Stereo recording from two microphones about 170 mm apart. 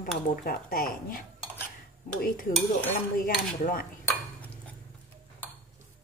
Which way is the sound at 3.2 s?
55° left (ahead or behind).